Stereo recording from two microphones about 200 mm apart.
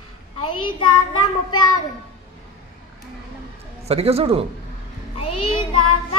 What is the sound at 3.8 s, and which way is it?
Speech, 30° right (ahead or behind).